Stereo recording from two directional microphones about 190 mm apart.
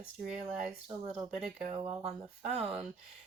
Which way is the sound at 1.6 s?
35° right (ahead or behind).